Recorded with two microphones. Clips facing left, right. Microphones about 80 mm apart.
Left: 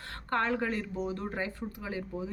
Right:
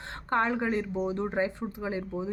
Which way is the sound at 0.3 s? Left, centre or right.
Centre.